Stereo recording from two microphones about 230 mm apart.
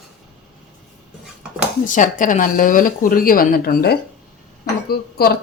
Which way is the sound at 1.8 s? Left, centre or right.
Left.